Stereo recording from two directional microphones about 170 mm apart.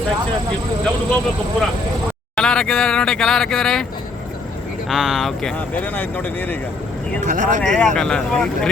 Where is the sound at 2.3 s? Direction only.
5° left (ahead or behind).